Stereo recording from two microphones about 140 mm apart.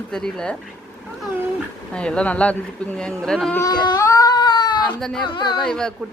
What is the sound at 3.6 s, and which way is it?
Baby cry, 30° left (ahead or behind).